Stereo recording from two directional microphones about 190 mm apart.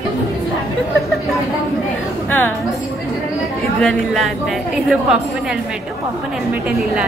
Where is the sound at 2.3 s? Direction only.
10° left (ahead or behind).